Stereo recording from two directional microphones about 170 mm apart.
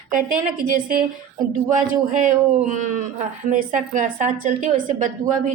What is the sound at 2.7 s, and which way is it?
A woman's voice, 50° right (ahead or behind).